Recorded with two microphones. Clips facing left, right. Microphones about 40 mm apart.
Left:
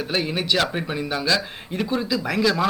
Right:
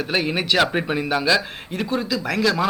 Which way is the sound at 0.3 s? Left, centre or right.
Centre.